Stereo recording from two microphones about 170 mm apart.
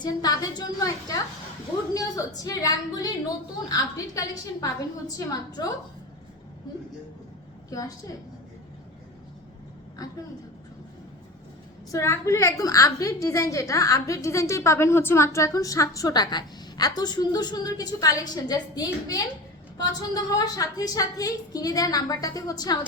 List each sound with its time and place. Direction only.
0.0 s a woman's voice: 20° left (ahead or behind)
7.7 s a woman's voice: 20° left (ahead or behind)
10.0 s a woman's voice: 20° left (ahead or behind)
11.9 s a woman's voice: 15° left (ahead or behind)